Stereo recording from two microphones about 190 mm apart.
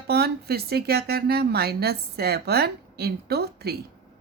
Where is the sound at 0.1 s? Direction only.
55° right (ahead or behind).